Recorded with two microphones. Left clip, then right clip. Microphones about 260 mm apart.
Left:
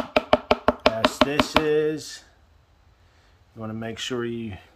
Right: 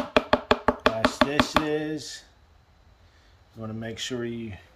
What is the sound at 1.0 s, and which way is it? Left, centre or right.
Speech, centre.